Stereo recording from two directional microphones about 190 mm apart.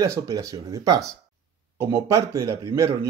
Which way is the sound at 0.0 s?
15° right (ahead or behind).